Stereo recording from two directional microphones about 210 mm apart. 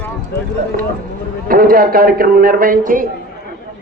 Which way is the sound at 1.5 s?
45° right (ahead or behind).